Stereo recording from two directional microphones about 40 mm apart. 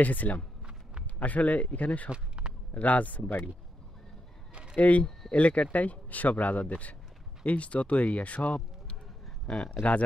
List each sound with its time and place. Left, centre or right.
0.0 s speech: left
2.0 s a sound: right
2.7 s speech: left
4.7 s speech: left